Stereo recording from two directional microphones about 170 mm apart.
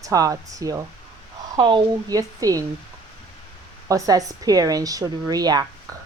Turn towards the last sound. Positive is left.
turn(degrees=-25)  # may be behind; listen again after turning